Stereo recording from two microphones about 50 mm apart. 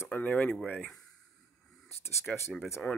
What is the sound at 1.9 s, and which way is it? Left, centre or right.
Speech, left.